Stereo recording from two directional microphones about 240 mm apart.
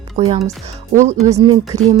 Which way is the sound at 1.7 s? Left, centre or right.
Right.